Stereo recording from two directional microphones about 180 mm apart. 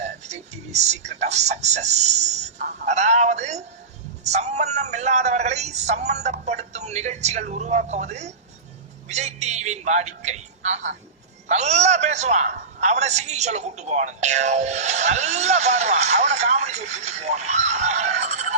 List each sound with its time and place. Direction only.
0.0 s music: 40° right (ahead or behind)
4.2 s a man's voice: 40° right (ahead or behind)